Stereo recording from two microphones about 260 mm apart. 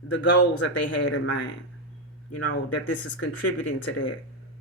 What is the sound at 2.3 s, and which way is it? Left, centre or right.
Speech, left.